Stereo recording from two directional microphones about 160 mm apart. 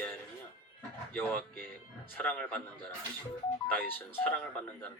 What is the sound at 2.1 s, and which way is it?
Speech, 10° left (ahead or behind).